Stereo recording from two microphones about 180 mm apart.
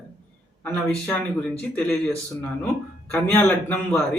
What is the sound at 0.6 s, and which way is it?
A man's voice, 5° left (ahead or behind).